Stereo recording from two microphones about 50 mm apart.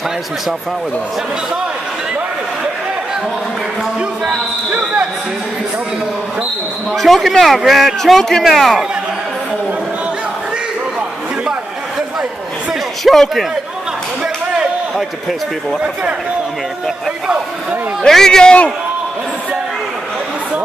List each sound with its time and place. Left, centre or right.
4.0 s basketball bounce: centre
7.0 s a man's voice: centre
13.0 s a man's voice: centre
14.2 s a sound: centre
15.8 s a man's voice: right
18.0 s a man's voice: centre